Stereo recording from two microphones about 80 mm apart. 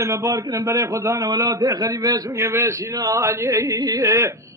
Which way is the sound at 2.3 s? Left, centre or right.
Right.